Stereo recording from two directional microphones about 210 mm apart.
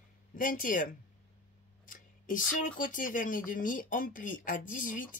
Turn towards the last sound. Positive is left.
turn(degrees=40)  # may be behind; listen again after turning